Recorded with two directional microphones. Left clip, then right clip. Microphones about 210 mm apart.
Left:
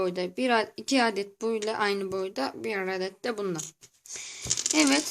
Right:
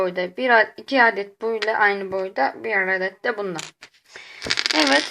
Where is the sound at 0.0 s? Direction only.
45° left (ahead or behind).